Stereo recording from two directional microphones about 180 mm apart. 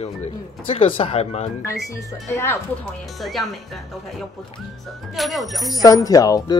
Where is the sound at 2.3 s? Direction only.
15° left (ahead or behind).